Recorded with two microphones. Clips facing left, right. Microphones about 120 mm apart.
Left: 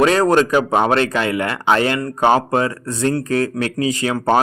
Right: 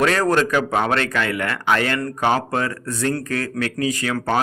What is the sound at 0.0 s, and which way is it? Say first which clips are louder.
A man's voice: left 4 dB; 20° left (ahead or behind).